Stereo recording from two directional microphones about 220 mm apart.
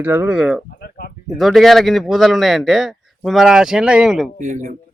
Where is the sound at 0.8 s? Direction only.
45° left (ahead or behind).